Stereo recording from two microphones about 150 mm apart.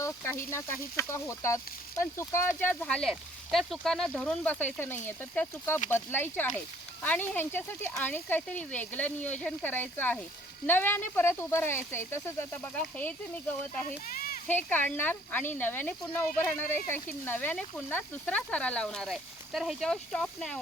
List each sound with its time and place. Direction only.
0.0 s speech: 15° left (ahead or behind)
2.8 s speech: 5° left (ahead or behind)
13.8 s a sound: 70° left (ahead or behind)
14.4 s speech: 10° left (ahead or behind)